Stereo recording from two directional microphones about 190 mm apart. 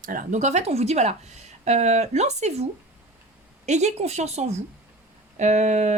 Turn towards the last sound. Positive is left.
turn(degrees=-35)  # may be behind; listen again after turning